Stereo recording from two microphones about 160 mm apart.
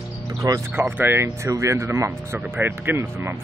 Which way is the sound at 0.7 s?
10° right (ahead or behind).